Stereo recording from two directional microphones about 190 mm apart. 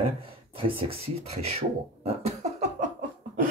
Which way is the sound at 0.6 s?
30° right (ahead or behind).